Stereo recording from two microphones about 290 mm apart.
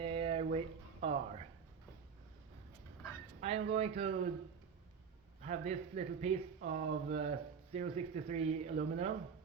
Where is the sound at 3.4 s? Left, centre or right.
Right.